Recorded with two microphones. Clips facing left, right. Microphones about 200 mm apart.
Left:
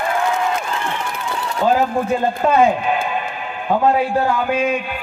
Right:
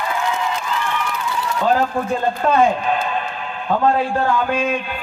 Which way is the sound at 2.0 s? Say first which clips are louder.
Left 2 dB; 20° left (ahead or behind).